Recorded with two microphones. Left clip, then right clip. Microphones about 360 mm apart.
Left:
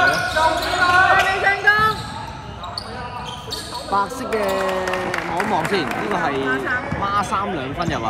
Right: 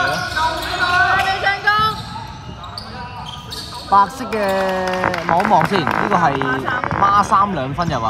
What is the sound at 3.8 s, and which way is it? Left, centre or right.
A man's voice, right.